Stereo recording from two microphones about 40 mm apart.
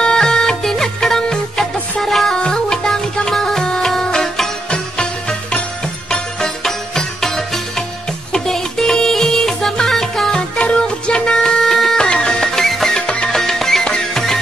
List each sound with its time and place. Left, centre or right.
0.0 s music: centre
2.3 s music: centre
6.0 s music: centre
10.3 s music: left; by 12.0 s centre
12.0 s music: left
12.4 s music: centre